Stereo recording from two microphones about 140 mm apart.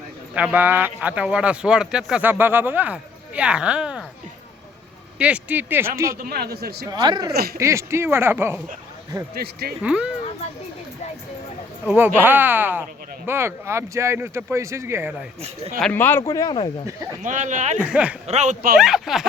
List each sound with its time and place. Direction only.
0.3 s speech: 10° right (ahead or behind)
5.2 s speech: 10° right (ahead or behind)
6.2 s a man's voice: 90° right
6.9 s speech: 30° right (ahead or behind)
9.8 s speech: 10° right (ahead or behind)
11.9 s speech: 15° right (ahead or behind)
15.8 s speech: 15° left (ahead or behind); by 16.6 s 30° left (ahead or behind)
17.2 s speech: 60° right (ahead or behind)
17.7 s speech: 10° right (ahead or behind)
18.3 s speech: 55° right (ahead or behind)
18.8 s speech: centre (ahead or behind)